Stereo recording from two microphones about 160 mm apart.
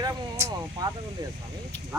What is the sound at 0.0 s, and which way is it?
Vehicle, 20° right (ahead or behind).